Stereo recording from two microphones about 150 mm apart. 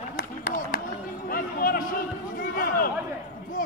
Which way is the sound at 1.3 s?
75° left (ahead or behind).